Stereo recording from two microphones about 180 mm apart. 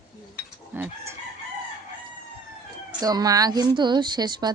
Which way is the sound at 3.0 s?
20° right (ahead or behind).